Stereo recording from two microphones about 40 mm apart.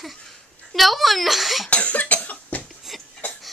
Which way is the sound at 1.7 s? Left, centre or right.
Left.